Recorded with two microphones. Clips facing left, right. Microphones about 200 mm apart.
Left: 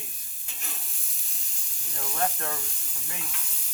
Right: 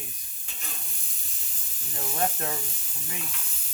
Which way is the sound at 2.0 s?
20° right (ahead or behind).